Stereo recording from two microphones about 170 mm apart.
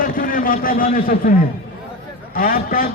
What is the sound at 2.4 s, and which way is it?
Speech, 55° left (ahead or behind).